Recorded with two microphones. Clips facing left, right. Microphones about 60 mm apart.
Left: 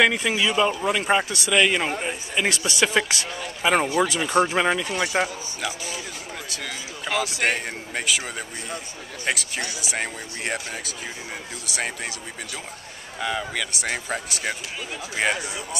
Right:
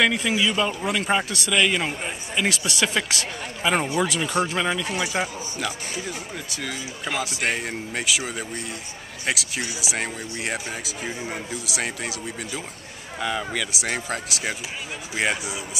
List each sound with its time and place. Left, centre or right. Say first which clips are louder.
0.0 s a man's voice: left 1 dB; centre
4.5 s speech: left 3 dB; centre
4.8 s a man's voice: left 2 dB; centre
7.1 s a man's voice: left 2 dB; centre
13.2 s a man's voice: even; centre